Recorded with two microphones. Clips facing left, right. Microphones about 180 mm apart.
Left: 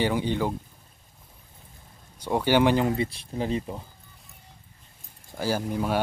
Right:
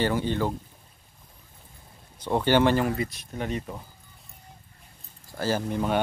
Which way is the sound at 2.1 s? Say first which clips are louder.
Even; 10° left (ahead or behind).